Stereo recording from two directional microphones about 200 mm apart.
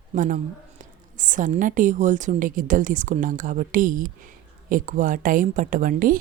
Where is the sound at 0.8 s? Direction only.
40° right (ahead or behind).